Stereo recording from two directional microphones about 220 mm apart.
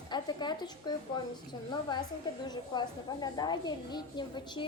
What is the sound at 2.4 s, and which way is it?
A child's voice, 20° left (ahead or behind).